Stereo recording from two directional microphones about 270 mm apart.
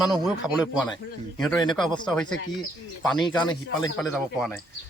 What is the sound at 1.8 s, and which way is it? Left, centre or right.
Speech, centre.